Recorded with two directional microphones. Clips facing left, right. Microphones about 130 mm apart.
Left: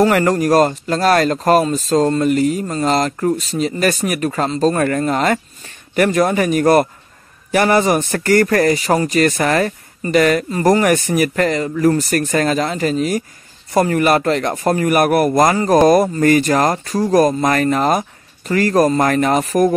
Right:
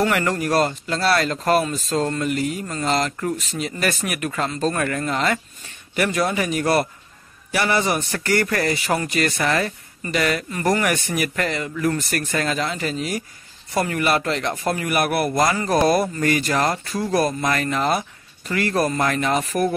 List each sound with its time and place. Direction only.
0.0 s a man's voice: 40° left (ahead or behind)